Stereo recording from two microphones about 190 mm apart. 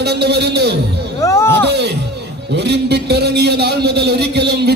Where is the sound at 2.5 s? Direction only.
60° right (ahead or behind).